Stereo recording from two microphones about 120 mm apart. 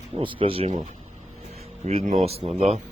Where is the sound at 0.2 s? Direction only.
45° right (ahead or behind).